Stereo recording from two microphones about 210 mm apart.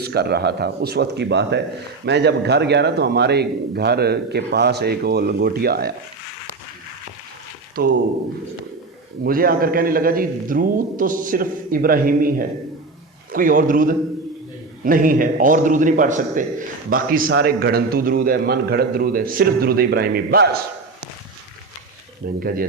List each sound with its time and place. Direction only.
0.0 s a man's voice: 50° right (ahead or behind)
7.8 s a man's voice: 45° right (ahead or behind)
9.2 s a man's voice: 45° right (ahead or behind)
22.4 s a man's voice: 45° right (ahead or behind)